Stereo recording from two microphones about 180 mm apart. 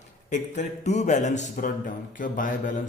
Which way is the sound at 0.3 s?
40° left (ahead or behind).